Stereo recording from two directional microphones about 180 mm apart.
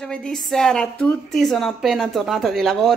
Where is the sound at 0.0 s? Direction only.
5° left (ahead or behind).